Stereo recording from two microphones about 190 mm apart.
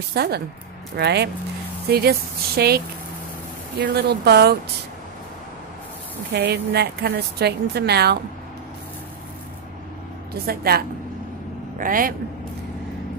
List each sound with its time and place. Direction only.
0.1 s a woman's voice: 55° right (ahead or behind)
3.8 s a woman's voice: 55° right (ahead or behind)
6.3 s a woman's voice: 60° right (ahead or behind)
10.3 s a woman's voice: 55° right (ahead or behind)
11.8 s a woman's voice: 45° right (ahead or behind)